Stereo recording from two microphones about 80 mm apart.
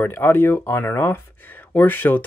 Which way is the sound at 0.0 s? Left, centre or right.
Left.